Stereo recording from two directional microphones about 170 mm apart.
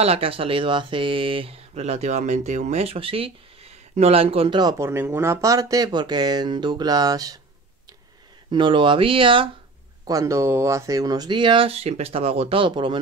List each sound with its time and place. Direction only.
0.0 s speech: 35° right (ahead or behind)
8.5 s speech: 25° right (ahead or behind)
10.0 s speech: 20° right (ahead or behind)